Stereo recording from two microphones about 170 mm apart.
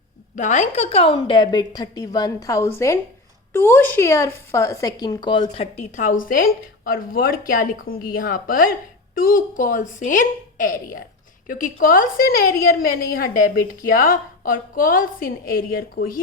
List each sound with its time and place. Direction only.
0.3 s a woman's voice: 45° left (ahead or behind); by 16.2 s 60° left (ahead or behind)